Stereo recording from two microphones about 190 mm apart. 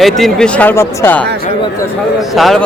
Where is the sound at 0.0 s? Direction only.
Centre (ahead or behind).